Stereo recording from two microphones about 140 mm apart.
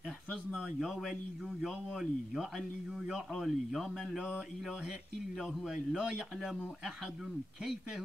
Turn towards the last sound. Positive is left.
turn(degrees=0)  # may be behind; listen again after turning